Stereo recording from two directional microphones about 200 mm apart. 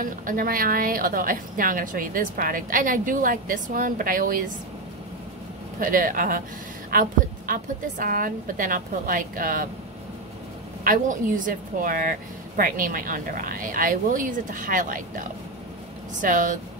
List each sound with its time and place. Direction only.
0.0 s a woman's voice: 45° right (ahead or behind)
5.8 s a woman's voice: 45° right (ahead or behind)
10.8 s a woman's voice: 40° right (ahead or behind)